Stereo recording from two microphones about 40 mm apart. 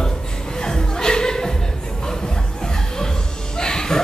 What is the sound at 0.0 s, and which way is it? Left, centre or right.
Chuckle, centre.